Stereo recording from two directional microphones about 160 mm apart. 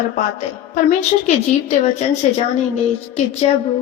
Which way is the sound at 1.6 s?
45° left (ahead or behind).